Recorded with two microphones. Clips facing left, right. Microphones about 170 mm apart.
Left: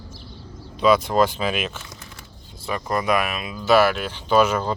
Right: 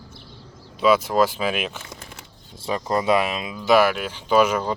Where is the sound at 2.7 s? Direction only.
25° right (ahead or behind).